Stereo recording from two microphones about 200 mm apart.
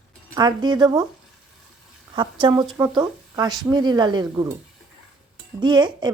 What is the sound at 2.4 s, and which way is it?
Speech, 25° right (ahead or behind).